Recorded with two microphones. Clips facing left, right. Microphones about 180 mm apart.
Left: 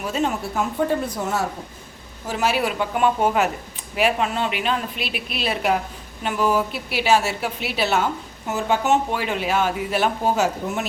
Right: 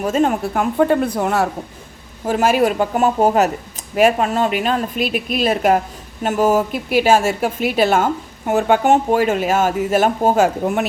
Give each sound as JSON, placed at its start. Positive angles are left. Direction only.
{"t": 0.0, "sound": "a woman's voice", "side_deg": -50}
{"t": 2.2, "sound": "a woman's voice", "side_deg": -50}